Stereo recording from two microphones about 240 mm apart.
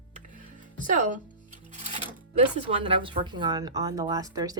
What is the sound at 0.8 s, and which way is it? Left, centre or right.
Speech, right.